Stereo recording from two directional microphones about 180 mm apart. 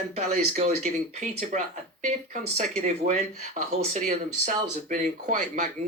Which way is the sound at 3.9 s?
45° right (ahead or behind).